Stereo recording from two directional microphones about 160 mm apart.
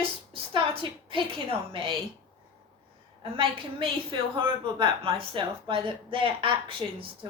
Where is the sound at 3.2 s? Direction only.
35° right (ahead or behind).